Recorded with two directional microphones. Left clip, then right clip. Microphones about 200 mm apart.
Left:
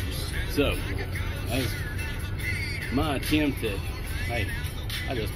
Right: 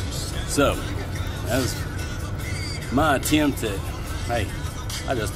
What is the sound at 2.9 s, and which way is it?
Speech, 15° right (ahead or behind).